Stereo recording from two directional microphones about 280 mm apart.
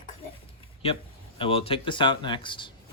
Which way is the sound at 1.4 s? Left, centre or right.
Centre.